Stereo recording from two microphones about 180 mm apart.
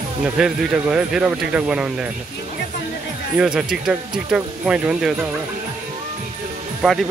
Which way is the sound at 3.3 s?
5° right (ahead or behind).